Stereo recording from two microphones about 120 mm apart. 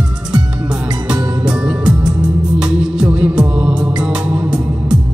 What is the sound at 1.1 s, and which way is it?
Music, 10° right (ahead or behind).